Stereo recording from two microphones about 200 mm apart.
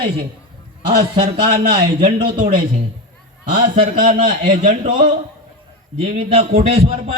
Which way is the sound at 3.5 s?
40° right (ahead or behind).